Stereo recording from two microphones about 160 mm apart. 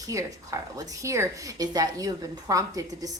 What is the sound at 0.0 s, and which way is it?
A woman's voice, 20° right (ahead or behind).